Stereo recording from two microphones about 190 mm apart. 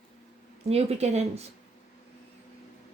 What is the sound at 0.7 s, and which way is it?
Speech, 35° right (ahead or behind).